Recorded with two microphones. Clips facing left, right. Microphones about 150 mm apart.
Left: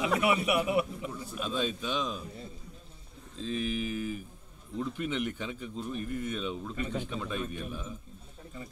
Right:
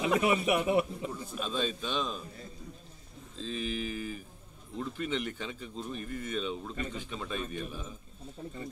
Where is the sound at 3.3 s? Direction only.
10° left (ahead or behind).